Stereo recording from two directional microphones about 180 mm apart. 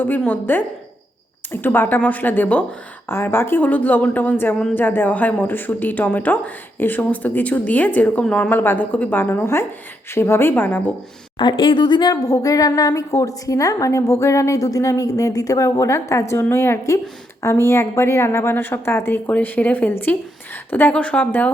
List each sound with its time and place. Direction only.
0.0 s speech: 10° left (ahead or behind)
1.6 s speech: 10° left (ahead or behind)
11.3 s speech: 25° left (ahead or behind); by 21.5 s 10° left (ahead or behind)